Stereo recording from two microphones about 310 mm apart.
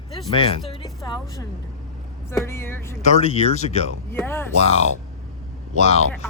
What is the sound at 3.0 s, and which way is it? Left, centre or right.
Speech, left.